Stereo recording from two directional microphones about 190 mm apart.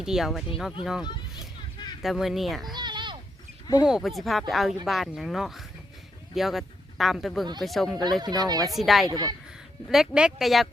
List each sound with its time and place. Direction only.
0.0 s speech: centre (ahead or behind)
2.0 s speech: centre (ahead or behind)
2.7 s a sound: 25° right (ahead or behind)
3.8 s speech: 5° right (ahead or behind)
8.2 s speech: 20° right (ahead or behind)
8.7 s speech: centre (ahead or behind)
9.0 s speech: 20° right (ahead or behind)
9.9 s speech: 5° right (ahead or behind)